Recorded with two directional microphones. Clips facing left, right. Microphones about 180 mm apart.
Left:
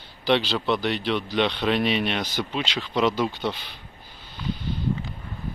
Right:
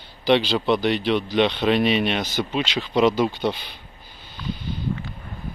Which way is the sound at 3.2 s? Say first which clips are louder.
Right 4 dB; 25° right (ahead or behind).